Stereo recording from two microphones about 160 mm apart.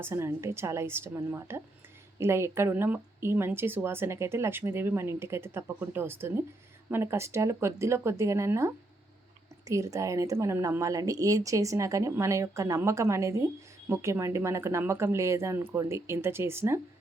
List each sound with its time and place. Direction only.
0.0 s speech: 15° right (ahead or behind)